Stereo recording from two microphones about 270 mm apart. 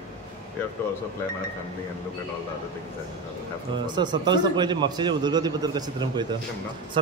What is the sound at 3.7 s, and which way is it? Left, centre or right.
A man's voice, centre.